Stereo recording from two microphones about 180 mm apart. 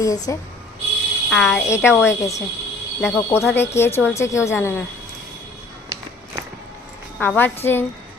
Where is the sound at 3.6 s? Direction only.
15° left (ahead or behind).